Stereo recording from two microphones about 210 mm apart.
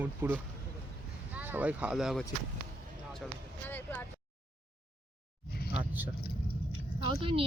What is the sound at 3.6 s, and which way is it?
Speech, 10° left (ahead or behind).